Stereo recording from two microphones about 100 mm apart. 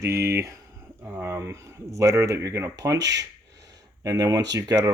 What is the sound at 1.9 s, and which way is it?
Speech, 30° right (ahead or behind).